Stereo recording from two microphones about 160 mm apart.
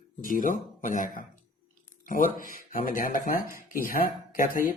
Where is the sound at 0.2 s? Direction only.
55° left (ahead or behind).